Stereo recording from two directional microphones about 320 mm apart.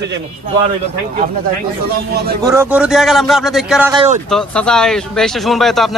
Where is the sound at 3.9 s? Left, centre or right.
Centre.